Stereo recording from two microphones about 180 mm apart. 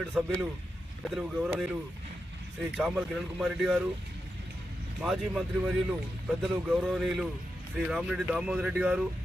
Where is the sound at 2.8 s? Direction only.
Centre (ahead or behind).